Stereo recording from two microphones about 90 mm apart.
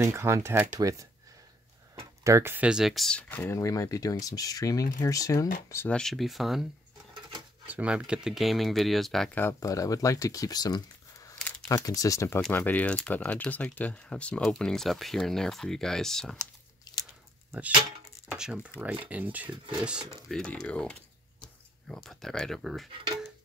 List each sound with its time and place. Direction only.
0.0 s speech: 30° right (ahead or behind)
2.0 s a sound: 30° right (ahead or behind)
2.6 s speech: 5° right (ahead or behind)
3.2 s speech: 20° left (ahead or behind)
3.5 s speech: 35° left (ahead or behind)
5.9 s speech: 5° left (ahead or behind)
7.6 s speech: 15° right (ahead or behind); by 9.3 s 5° left (ahead or behind)
9.3 s speech: 20° left (ahead or behind)
9.6 s speech: 40° left (ahead or behind)
12.5 s speech: 20° left (ahead or behind)
16.9 s a sound: 45° left (ahead or behind)
18.3 s speech: 10° right (ahead or behind)
20.2 s speech: 5° left (ahead or behind)